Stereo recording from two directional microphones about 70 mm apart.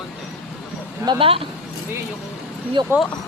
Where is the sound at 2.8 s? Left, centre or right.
Right.